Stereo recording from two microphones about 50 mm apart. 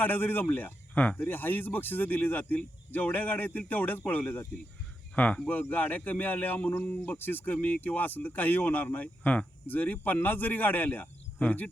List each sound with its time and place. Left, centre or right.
0.0 s speech: left